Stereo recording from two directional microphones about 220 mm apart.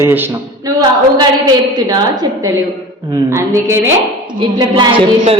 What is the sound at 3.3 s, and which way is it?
Speech, 10° right (ahead or behind).